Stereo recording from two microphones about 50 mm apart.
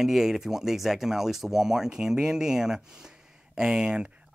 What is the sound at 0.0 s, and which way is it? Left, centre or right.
Speech, centre.